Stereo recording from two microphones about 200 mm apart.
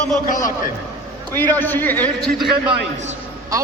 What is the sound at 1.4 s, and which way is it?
A man's voice, 10° left (ahead or behind).